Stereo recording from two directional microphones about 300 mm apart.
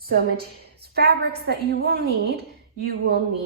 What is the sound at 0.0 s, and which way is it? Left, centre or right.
A woman's voice, right.